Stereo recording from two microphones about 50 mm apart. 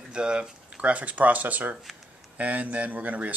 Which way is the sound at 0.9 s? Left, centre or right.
Right.